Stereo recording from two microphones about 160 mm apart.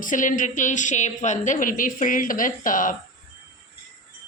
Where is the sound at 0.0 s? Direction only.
55° left (ahead or behind).